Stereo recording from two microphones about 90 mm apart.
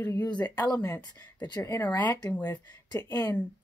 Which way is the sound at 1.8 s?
20° left (ahead or behind).